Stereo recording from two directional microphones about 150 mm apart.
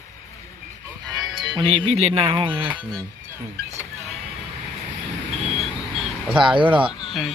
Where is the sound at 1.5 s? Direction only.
35° right (ahead or behind).